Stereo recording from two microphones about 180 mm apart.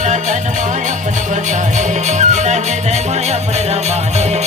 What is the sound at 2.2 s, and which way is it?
Music, 40° right (ahead or behind).